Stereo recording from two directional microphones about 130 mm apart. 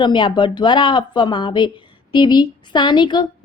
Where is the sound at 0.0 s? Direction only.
35° left (ahead or behind).